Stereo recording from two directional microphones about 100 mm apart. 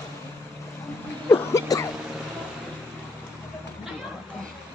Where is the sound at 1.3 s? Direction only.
30° left (ahead or behind).